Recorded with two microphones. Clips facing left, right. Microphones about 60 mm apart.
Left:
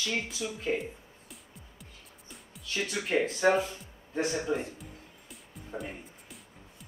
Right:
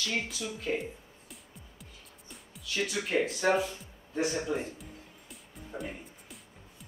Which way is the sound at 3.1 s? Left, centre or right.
Centre.